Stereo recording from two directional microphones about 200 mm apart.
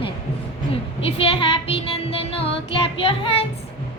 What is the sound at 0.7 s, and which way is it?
Music, 30° left (ahead or behind).